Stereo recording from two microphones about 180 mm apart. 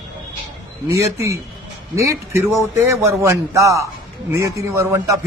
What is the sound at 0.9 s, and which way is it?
A man's voice, 15° right (ahead or behind).